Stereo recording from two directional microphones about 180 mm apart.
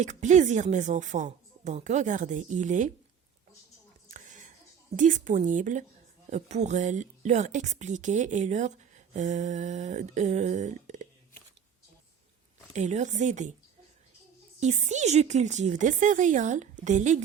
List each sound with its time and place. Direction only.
0.0 s a woman's voice: 40° right (ahead or behind)
4.1 s a sound: 45° right (ahead or behind)
4.9 s a woman's voice: 45° right (ahead or behind)
12.7 s speech: 40° right (ahead or behind)
14.6 s speech: 40° right (ahead or behind)